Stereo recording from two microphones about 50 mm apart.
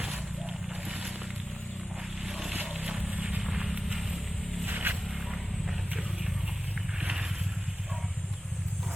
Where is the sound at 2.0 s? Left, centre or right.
Centre.